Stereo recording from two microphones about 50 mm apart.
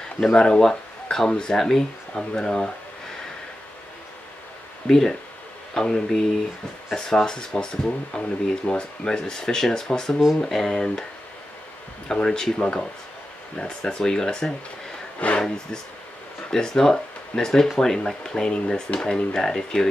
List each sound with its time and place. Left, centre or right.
0.2 s speech: centre
4.8 s speech: centre
12.1 s speech: centre
15.1 s speech: left
15.4 s speech: centre